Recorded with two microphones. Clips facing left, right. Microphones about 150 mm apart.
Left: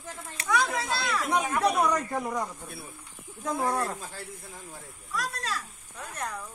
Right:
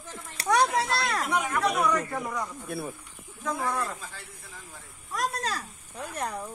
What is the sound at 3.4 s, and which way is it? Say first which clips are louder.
Speech: left 2 dB; 30° left (ahead or behind).